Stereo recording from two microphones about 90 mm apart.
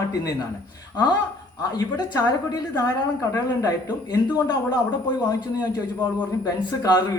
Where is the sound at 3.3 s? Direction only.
45° left (ahead or behind).